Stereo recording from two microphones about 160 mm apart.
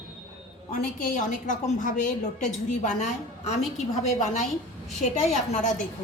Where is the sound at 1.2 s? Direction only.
50° left (ahead or behind).